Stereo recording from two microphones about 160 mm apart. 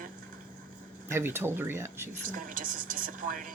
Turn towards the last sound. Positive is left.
turn(degrees=-55)  # may be behind; listen again after turning